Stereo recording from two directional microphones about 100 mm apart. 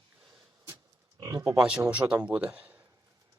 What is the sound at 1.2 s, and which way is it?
Speech, 35° right (ahead or behind).